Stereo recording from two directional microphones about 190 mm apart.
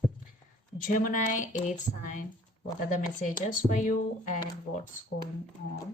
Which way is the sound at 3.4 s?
40° left (ahead or behind).